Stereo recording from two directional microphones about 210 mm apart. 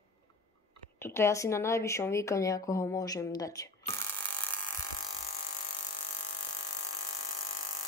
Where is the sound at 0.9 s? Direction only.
10° left (ahead or behind).